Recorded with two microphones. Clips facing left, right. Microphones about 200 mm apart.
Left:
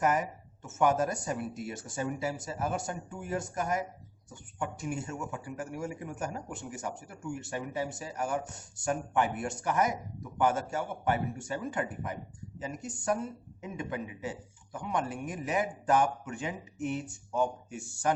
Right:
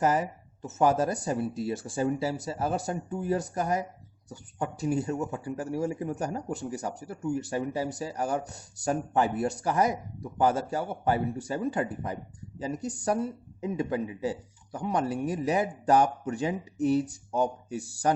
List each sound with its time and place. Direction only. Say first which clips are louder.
0.0 s speech: right 3 dB; 35° right (ahead or behind)